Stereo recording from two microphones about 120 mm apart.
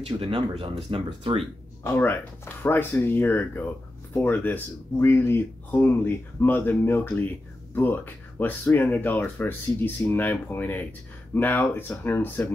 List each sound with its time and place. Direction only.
0.0 s speech: 50° right (ahead or behind)
1.8 s speech: 20° left (ahead or behind)